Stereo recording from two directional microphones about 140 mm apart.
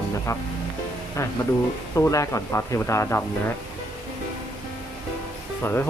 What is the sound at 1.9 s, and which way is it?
Speech, 20° left (ahead or behind).